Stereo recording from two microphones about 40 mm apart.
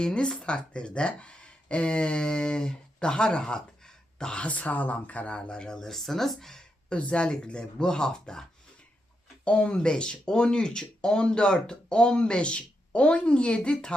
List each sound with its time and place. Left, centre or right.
0.0 s speech: left
4.4 s speech: left
5.3 s speech: left; by 6.7 s centre
6.9 s speech: left
9.4 s speech: left